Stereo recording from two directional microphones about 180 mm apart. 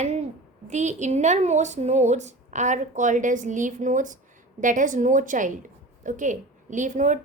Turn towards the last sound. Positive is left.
turn(degrees=-45)  # may be behind; listen again after turning